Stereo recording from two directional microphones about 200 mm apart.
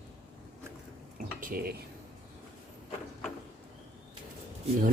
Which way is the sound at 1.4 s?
45° right (ahead or behind).